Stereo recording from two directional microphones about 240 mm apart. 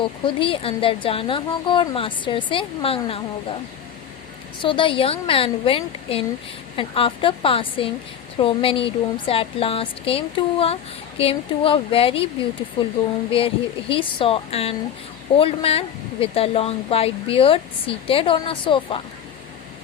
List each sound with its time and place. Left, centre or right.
0.0 s a woman's voice: left
4.6 s a woman's voice: left